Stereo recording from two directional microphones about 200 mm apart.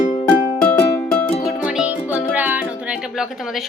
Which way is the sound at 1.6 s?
5° right (ahead or behind).